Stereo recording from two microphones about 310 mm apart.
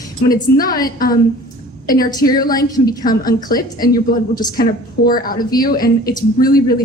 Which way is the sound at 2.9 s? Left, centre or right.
Left.